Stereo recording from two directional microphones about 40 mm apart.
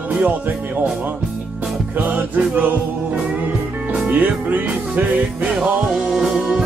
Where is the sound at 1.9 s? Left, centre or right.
Right.